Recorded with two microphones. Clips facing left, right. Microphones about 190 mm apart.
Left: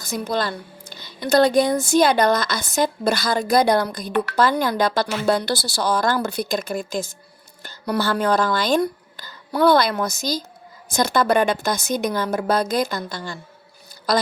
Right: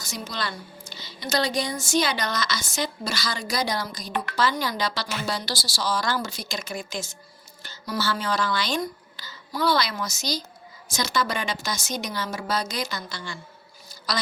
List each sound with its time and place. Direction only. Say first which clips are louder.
0.0 s a woman's voice: left 9 dB; 55° left (ahead or behind)